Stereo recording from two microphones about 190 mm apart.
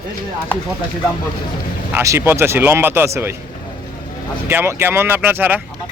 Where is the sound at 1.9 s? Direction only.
15° right (ahead or behind).